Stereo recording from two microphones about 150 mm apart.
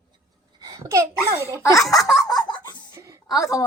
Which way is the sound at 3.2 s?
25° left (ahead or behind).